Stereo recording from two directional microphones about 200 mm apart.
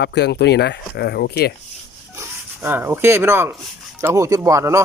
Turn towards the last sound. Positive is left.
turn(degrees=-15)  # may be behind; listen again after turning